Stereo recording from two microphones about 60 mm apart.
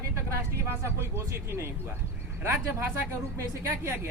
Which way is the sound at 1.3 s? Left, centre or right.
Right.